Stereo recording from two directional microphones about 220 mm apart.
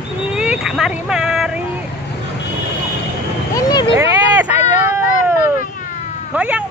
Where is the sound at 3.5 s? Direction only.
20° left (ahead or behind).